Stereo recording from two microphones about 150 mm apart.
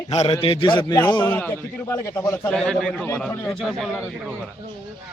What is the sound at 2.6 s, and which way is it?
A man's voice, 5° left (ahead or behind).